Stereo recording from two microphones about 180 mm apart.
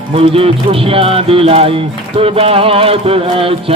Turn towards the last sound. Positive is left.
turn(degrees=-30)  # may be behind; listen again after turning